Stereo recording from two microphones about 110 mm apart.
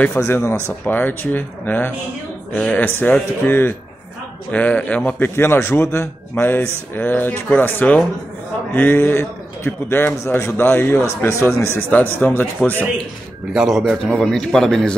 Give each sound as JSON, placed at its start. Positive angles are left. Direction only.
{"t": 0.2, "sound": "a man's voice", "side_deg": 25}
{"t": 13.5, "sound": "a man's voice", "side_deg": 0}